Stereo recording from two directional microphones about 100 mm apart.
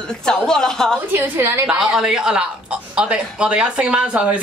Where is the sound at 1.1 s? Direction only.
25° right (ahead or behind).